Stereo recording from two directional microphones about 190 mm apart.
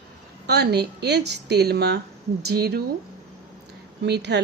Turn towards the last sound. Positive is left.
turn(degrees=-65)  # may be behind; listen again after turning